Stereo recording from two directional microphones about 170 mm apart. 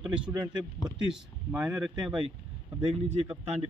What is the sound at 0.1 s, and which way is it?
Speech, 5° right (ahead or behind).